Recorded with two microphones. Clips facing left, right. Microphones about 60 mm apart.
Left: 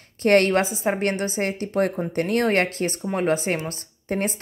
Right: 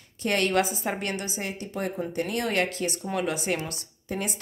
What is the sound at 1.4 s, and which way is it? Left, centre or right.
A woman's voice, left.